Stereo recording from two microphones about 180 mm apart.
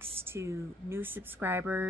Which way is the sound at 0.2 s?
15° right (ahead or behind).